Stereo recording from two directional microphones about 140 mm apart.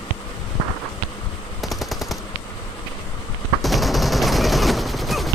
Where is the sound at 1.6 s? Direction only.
Centre (ahead or behind).